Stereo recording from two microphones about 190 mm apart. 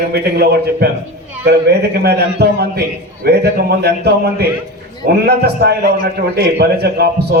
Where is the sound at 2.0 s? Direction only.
60° right (ahead or behind).